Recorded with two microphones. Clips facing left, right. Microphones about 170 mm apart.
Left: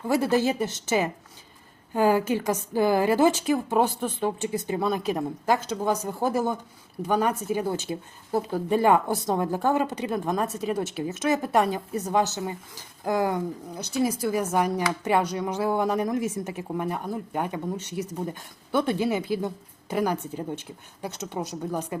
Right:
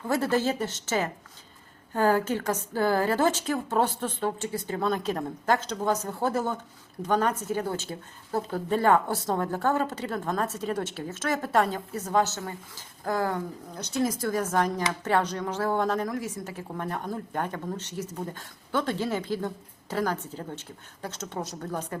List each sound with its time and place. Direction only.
0.1 s a woman's voice: 15° left (ahead or behind)